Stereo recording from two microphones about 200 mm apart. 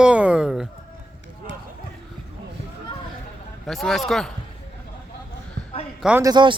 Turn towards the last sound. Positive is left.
turn(degrees=-25)  # may be behind; listen again after turning